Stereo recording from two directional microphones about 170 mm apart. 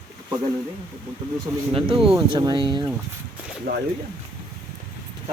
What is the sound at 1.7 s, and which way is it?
Speech, 30° right (ahead or behind).